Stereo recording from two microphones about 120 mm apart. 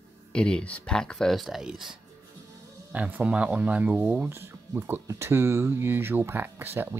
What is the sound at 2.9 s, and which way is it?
Speech, 15° right (ahead or behind).